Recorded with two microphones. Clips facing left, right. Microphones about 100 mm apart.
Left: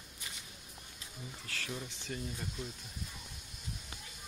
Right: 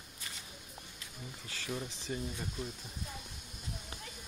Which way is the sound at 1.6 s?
15° right (ahead or behind).